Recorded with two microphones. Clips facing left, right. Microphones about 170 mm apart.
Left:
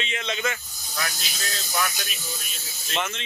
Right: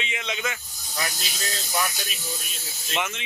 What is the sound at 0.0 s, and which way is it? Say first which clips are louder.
Speech: left 2 dB; 15° right (ahead or behind).